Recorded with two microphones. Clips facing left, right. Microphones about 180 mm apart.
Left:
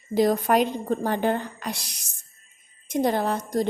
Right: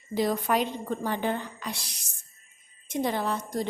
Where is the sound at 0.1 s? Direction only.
45° left (ahead or behind).